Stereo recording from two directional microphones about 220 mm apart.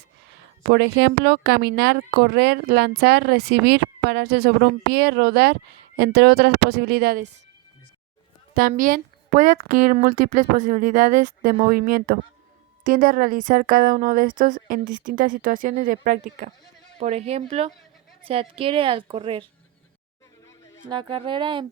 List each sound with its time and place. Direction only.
0.6 s speech: 50° right (ahead or behind)
8.5 s a woman's voice: 40° right (ahead or behind); by 19.5 s 25° right (ahead or behind)
20.8 s a woman's voice: 20° right (ahead or behind)